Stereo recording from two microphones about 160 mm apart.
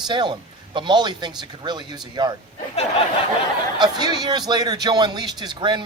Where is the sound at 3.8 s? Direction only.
25° right (ahead or behind).